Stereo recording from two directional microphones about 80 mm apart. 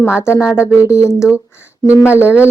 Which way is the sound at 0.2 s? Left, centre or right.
Left.